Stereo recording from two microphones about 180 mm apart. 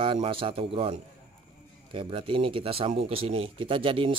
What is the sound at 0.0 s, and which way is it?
A man's voice, 30° right (ahead or behind).